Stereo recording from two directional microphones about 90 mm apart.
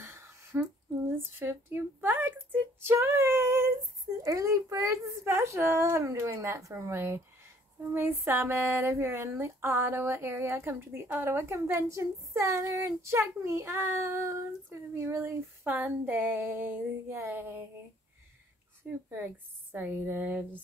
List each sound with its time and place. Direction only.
0.0 s a sound: 30° right (ahead or behind)
4.2 s a woman's voice: 40° right (ahead or behind)
19.1 s speech: 20° right (ahead or behind)